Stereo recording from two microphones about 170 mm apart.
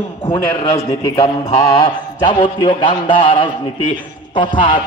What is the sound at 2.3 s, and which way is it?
Speech, 30° left (ahead or behind).